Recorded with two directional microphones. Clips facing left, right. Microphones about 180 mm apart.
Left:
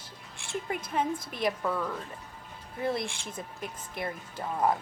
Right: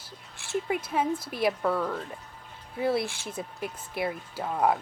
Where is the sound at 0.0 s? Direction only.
5° right (ahead or behind).